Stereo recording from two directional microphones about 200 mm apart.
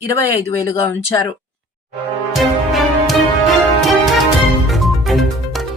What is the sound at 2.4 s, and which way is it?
Music, centre (ahead or behind).